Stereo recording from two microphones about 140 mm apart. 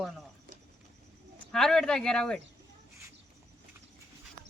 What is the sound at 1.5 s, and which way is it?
Speech, 5° left (ahead or behind).